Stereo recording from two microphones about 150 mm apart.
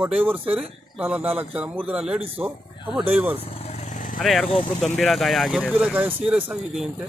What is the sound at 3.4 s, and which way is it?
Vehicle, 40° left (ahead or behind).